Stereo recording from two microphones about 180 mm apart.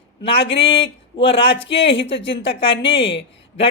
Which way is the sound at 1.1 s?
30° left (ahead or behind).